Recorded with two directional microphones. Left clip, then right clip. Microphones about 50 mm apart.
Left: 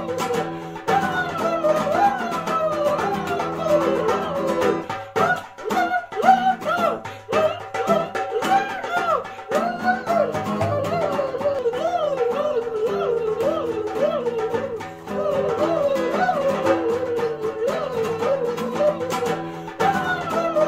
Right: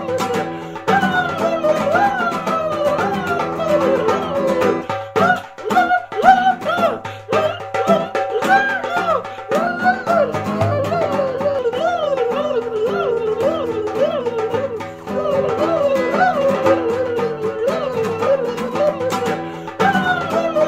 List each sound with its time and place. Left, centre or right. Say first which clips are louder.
0.1 s music: right 4 dB; right
15.2 s music: right 3 dB; right